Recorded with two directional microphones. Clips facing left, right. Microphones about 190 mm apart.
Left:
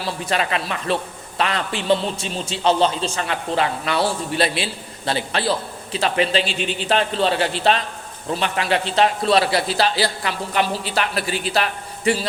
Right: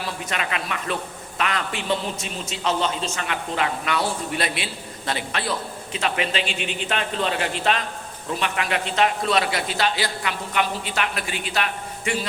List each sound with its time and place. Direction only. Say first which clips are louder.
0.0 s a man's voice: left 5 dB; 35° left (ahead or behind)